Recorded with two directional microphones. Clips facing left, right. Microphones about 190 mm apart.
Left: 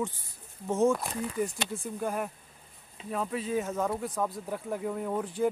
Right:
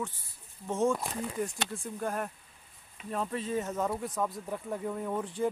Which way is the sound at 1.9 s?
5° left (ahead or behind).